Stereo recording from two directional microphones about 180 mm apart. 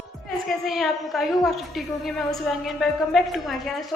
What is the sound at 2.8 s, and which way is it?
Speech, centre (ahead or behind).